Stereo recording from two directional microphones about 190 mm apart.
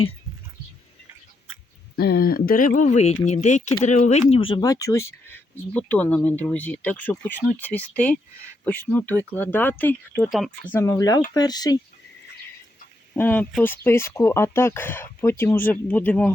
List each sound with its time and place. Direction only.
2.0 s speech: 55° left (ahead or behind); by 11.8 s 20° left (ahead or behind)
13.1 s speech: 10° left (ahead or behind)